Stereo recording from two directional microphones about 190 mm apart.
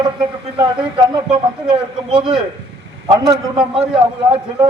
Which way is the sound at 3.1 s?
20° right (ahead or behind).